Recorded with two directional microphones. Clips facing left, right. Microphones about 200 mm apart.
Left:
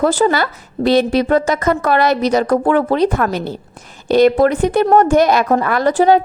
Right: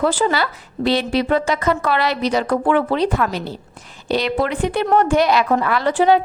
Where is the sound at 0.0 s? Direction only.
45° left (ahead or behind).